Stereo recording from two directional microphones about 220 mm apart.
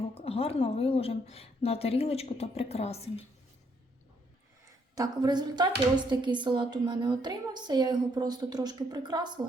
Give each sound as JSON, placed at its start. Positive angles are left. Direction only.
{"t": 0.1, "sound": "a woman's voice", "side_deg": 25}
{"t": 4.9, "sound": "a woman's voice", "side_deg": -20}